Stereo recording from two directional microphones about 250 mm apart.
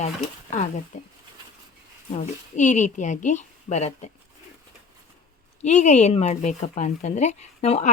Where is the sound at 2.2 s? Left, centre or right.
Left.